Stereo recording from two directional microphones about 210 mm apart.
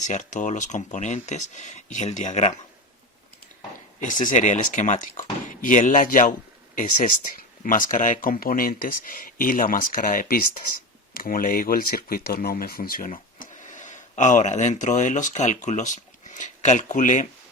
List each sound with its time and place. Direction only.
0.1 s speech: 35° left (ahead or behind)
4.0 s speech: 35° left (ahead or behind)
7.6 s speech: 40° left (ahead or behind)